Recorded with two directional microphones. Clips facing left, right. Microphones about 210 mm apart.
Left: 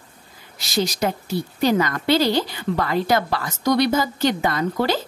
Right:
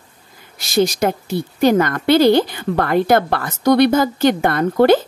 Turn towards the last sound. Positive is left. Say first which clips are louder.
# right 9 dB
turn(degrees=-55)  # may be behind; listen again after turning